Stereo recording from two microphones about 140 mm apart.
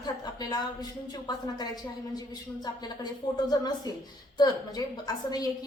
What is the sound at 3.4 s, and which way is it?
Speech, 30° left (ahead or behind).